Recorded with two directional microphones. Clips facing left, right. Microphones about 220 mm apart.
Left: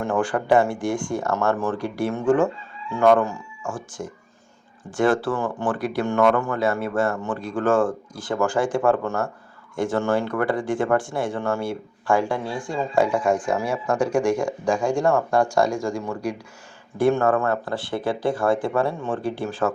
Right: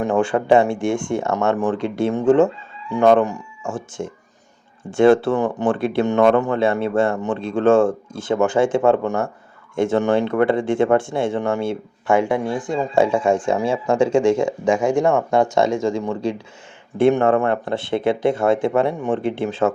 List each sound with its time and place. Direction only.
0.0 s speech: 25° right (ahead or behind)